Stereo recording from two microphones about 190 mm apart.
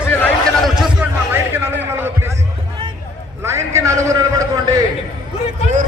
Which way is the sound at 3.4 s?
15° right (ahead or behind).